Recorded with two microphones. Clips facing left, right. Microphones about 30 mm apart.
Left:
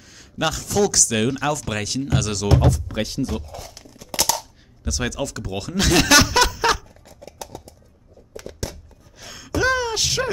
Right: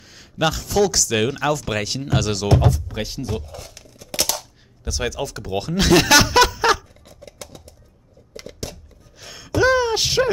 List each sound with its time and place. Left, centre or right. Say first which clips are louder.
0.0 s a sound: right 1 dB; centre
0.4 s speech: right 2 dB; centre
2.6 s speech: left 1 dB; centre
4.8 s speech: even; centre
9.2 s gasp: right 3 dB; centre